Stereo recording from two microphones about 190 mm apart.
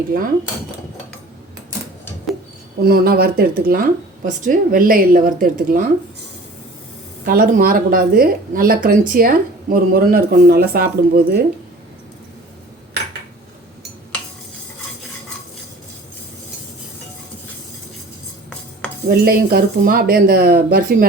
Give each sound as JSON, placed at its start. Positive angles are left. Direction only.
{"t": 0.1, "sound": "a woman's voice", "side_deg": -50}
{"t": 2.8, "sound": "a woman's voice", "side_deg": -55}
{"t": 7.3, "sound": "a woman's voice", "side_deg": -45}
{"t": 19.0, "sound": "a woman's voice", "side_deg": -50}